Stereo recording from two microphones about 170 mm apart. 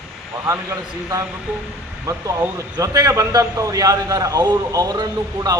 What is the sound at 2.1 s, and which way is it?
Speech, 20° right (ahead or behind).